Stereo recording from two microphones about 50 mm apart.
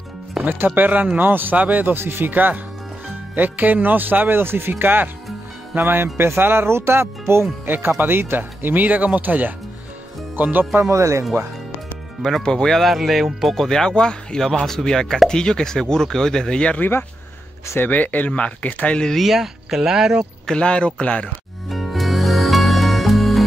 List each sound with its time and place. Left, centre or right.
0.4 s speech: right
2.0 s speech: right
7.6 s speech: right
10.8 s speech: right
12.2 s speech: centre
12.4 s speech: centre
12.8 s speech: centre
13.6 s speech: centre
17.7 s speech: left
19.1 s speech: centre
20.4 s speech: centre
21.6 s music: centre